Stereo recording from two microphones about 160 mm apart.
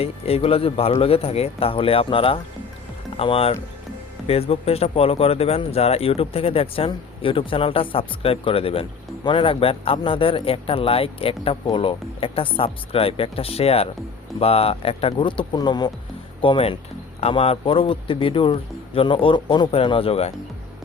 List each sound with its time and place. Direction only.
0.0 s speech: 40° left (ahead or behind)